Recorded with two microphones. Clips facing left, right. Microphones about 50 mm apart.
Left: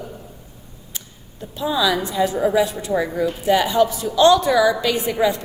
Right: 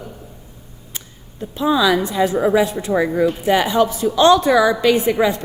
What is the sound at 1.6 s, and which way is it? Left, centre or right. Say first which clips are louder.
A woman's voice: right 4 dB; right.